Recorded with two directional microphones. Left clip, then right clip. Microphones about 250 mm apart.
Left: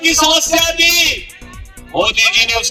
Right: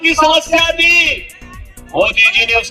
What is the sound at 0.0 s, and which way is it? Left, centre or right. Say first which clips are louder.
Speech: right 1 dB; centre.